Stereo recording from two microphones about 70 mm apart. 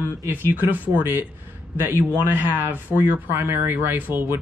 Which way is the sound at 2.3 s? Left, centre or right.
Right.